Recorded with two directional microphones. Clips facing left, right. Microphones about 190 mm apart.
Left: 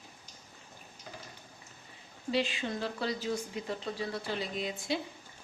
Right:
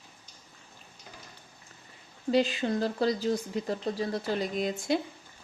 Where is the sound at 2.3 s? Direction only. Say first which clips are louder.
Right 6 dB; 40° right (ahead or behind).